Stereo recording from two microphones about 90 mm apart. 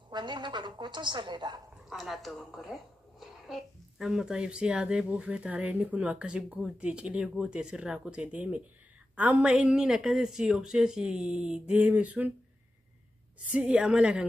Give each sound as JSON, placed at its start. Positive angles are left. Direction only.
{"t": 0.1, "sound": "a woman's voice", "side_deg": -60}
{"t": 1.9, "sound": "a woman's voice", "side_deg": 0}
{"t": 13.5, "sound": "a woman's voice", "side_deg": -10}